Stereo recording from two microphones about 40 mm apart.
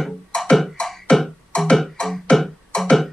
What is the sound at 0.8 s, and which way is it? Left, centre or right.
Beatboxing, left.